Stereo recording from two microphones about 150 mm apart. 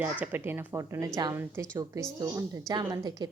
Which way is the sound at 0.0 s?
10° right (ahead or behind).